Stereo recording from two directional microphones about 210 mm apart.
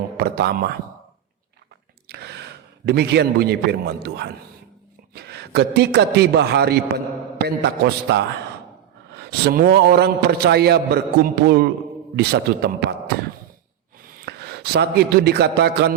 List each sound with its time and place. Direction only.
0.2 s a man's voice: 50° right (ahead or behind)
2.0 s a man's voice: 50° right (ahead or behind)
14.3 s a man's voice: 50° right (ahead or behind)